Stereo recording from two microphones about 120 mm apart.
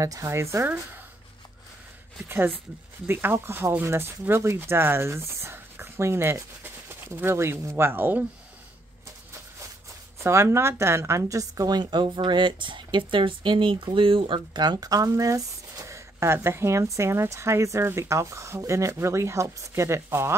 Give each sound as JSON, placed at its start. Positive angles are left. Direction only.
{"t": 0.0, "sound": "a woman's voice", "side_deg": -25}
{"t": 2.2, "sound": "a woman's voice", "side_deg": -20}
{"t": 10.2, "sound": "a woman's voice", "side_deg": -20}